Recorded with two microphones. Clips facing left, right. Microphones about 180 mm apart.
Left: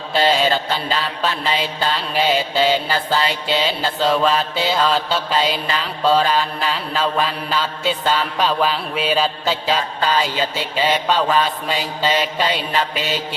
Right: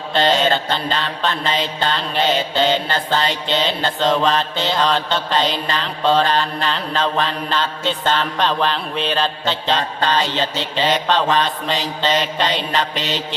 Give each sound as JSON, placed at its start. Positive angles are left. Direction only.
{"t": 0.3, "sound": "mantra", "side_deg": 5}